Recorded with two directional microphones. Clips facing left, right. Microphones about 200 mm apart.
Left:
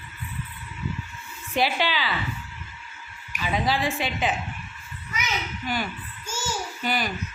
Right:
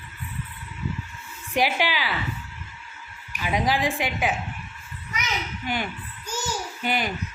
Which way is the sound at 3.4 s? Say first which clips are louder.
Right 1 dB; 15° right (ahead or behind).